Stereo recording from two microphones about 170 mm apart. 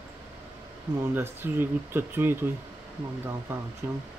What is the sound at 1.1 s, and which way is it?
Speech, 15° right (ahead or behind).